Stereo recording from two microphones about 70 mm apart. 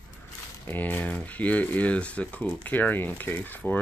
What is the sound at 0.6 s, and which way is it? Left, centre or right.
Speech, left.